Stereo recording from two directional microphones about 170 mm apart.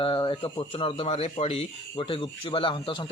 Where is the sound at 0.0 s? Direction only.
30° left (ahead or behind).